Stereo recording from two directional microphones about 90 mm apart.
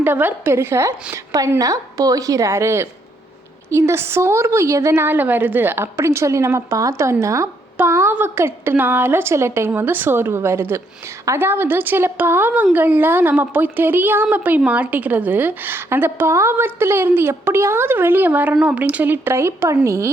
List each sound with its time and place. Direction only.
0.0 s a woman's voice: 20° right (ahead or behind)